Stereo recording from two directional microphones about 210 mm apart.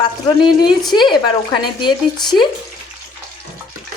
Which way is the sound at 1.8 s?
20° left (ahead or behind).